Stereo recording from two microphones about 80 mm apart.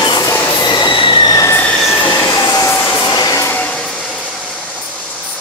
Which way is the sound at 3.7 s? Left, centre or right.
Centre.